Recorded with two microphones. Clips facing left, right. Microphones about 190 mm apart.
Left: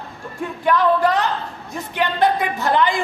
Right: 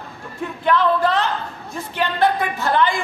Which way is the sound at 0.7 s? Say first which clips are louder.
Left 1 dB; 15° left (ahead or behind).